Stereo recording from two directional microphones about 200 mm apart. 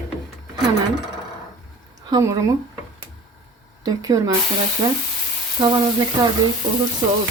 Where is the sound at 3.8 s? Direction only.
15° right (ahead or behind).